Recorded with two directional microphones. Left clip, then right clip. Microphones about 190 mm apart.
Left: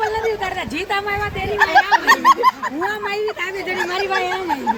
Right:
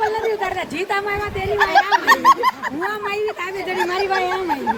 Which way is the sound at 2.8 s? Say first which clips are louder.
Even; 45° right (ahead or behind).